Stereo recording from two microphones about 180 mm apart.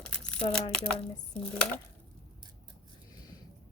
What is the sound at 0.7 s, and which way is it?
Speech, 5° left (ahead or behind).